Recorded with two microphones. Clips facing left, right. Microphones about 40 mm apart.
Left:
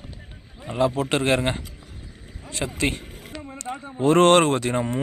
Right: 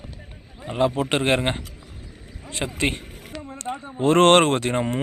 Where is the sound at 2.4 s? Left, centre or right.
Right.